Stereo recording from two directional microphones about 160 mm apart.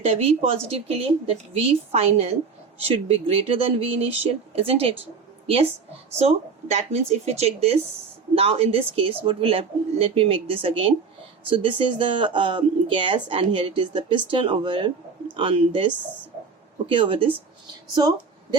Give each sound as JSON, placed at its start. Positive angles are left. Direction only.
{"t": 0.0, "sound": "speech", "side_deg": -40}
{"t": 16.9, "sound": "speech", "side_deg": -35}